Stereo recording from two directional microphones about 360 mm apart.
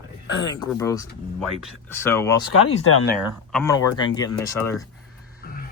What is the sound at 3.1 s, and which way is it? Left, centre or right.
Speech, centre.